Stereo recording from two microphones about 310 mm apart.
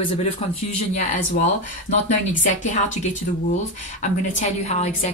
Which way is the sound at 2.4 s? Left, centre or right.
Left.